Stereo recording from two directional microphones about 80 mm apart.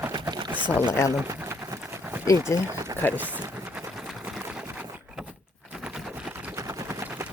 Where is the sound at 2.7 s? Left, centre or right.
Right.